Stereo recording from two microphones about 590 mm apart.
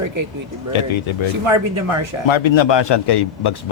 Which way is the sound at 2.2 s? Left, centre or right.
Left.